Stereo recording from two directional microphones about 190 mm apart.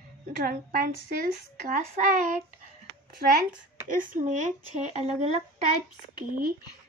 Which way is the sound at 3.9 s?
45° right (ahead or behind).